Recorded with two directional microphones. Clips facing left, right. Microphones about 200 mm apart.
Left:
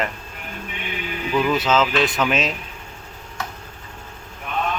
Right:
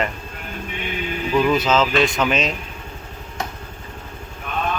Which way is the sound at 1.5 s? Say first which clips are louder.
Right 1 dB; 5° left (ahead or behind).